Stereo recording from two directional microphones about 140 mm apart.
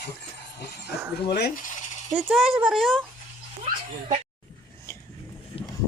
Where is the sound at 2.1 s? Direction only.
5° right (ahead or behind).